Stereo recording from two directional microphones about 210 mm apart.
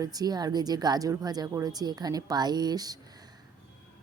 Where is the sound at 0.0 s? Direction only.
20° right (ahead or behind).